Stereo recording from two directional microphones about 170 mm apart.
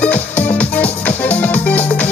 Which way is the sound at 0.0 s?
10° left (ahead or behind).